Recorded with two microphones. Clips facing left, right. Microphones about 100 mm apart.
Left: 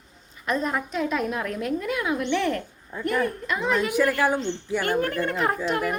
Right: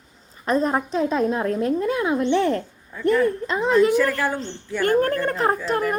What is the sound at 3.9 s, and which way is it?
Speech, 15° left (ahead or behind).